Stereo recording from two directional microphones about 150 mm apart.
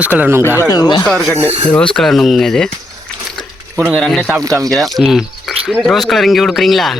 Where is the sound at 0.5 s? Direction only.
25° left (ahead or behind).